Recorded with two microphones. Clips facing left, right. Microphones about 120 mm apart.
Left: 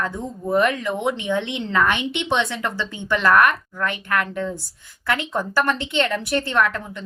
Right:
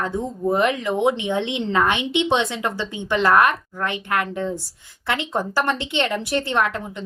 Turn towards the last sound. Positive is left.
turn(degrees=-20)  # may be behind; listen again after turning